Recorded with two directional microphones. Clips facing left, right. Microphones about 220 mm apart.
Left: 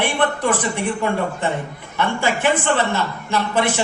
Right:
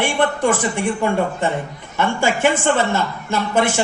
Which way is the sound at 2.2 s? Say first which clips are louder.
Right 2 dB; 45° right (ahead or behind).